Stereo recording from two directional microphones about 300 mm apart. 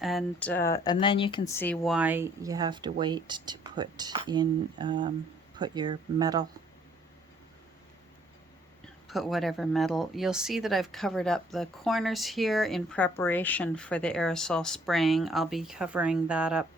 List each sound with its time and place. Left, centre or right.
0.0 s speech: centre
9.0 s speech: centre